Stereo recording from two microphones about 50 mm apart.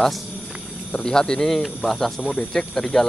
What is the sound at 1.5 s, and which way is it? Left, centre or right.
Speech, centre.